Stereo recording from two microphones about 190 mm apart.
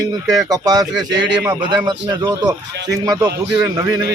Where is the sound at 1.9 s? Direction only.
20° right (ahead or behind).